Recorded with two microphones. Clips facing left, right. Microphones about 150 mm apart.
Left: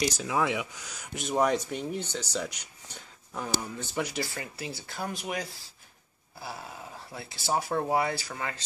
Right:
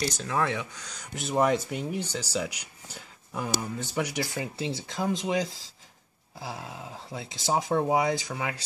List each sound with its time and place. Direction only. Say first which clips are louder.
0.0 s speech: even; 10° left (ahead or behind); by 4.0 s 5° right (ahead or behind)
4.3 s speech: right 6 dB; 20° right (ahead or behind)